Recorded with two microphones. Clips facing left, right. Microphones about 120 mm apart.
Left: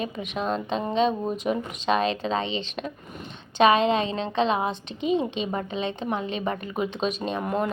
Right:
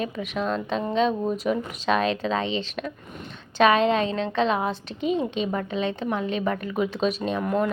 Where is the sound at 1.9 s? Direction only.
Centre (ahead or behind).